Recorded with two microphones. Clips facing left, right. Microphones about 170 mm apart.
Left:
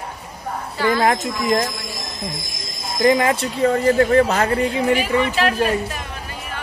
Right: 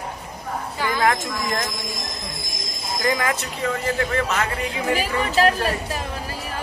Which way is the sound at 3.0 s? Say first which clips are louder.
Left 8 dB; 30° left (ahead or behind).